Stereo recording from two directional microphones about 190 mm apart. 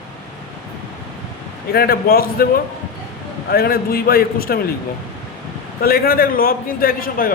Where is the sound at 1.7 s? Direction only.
55° left (ahead or behind).